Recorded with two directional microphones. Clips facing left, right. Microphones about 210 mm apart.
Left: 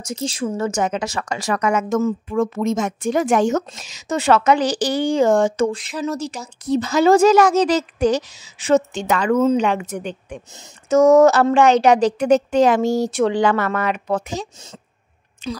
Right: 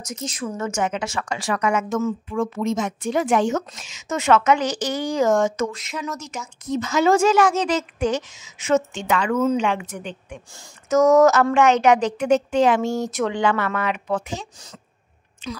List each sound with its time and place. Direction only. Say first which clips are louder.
0.0 s speech: left 5 dB; 30° left (ahead or behind)
10.5 s speech: left 3 dB; 25° left (ahead or behind)